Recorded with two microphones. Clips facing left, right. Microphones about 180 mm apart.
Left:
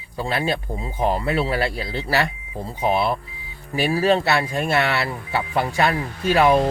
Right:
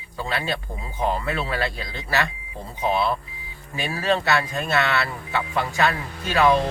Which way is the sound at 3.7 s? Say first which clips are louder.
Left 5 dB; 30° left (ahead or behind).